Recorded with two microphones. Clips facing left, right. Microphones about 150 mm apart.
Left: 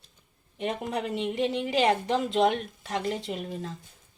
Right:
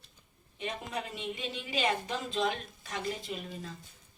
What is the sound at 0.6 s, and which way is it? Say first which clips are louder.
A woman's voice: left 7 dB; 60° left (ahead or behind).